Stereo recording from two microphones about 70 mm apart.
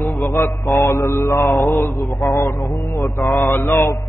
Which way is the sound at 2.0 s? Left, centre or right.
Centre.